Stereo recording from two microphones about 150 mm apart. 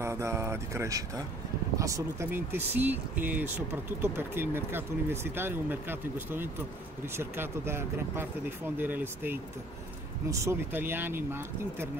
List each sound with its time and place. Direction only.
0.0 s speech: 20° right (ahead or behind)